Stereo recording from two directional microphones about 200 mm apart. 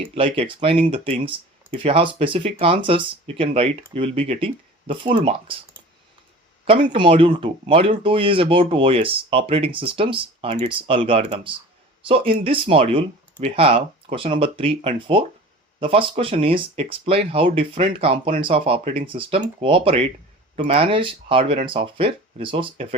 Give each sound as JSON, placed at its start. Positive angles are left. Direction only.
{"t": 0.0, "sound": "speech", "side_deg": -30}
{"t": 6.7, "sound": "speech", "side_deg": -25}